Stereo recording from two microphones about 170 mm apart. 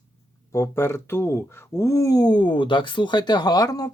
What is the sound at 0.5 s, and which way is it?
Speech, 15° left (ahead or behind).